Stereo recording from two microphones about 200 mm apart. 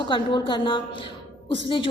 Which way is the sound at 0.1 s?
25° left (ahead or behind).